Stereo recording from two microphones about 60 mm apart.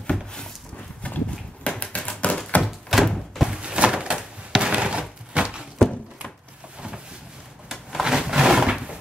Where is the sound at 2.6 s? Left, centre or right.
Centre.